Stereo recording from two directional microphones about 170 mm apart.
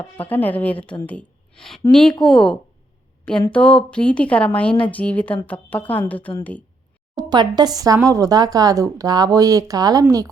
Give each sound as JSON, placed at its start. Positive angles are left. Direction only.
{"t": 0.2, "sound": "a woman's voice", "side_deg": 10}
{"t": 7.2, "sound": "speech", "side_deg": -25}